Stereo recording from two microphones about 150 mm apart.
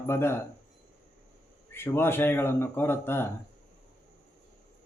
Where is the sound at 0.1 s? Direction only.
15° left (ahead or behind).